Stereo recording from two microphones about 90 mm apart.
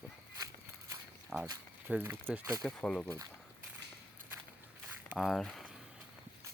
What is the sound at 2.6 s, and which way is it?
Speech, 10° left (ahead or behind).